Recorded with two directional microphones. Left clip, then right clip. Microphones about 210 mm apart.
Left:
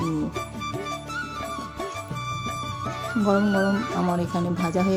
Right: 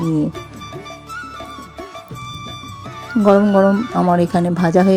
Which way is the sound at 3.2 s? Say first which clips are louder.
Right 11 dB; 30° right (ahead or behind).